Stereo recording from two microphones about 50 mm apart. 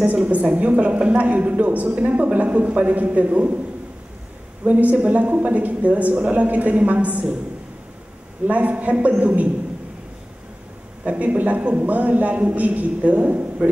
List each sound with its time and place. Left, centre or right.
0.0 s a man's voice: right
4.6 s a woman's voice: right
8.5 s a man's voice: right
11.1 s a man's voice: right